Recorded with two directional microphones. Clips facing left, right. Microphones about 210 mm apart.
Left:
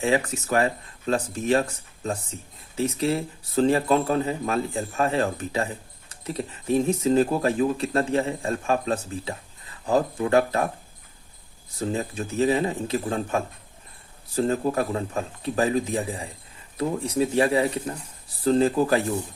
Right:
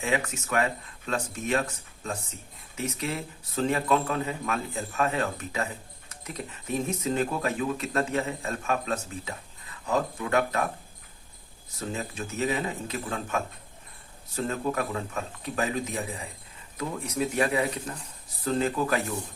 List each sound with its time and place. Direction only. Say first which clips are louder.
0.0 s speech: left 5 dB; 35° left (ahead or behind)
11.7 s speech: left 6 dB; 30° left (ahead or behind)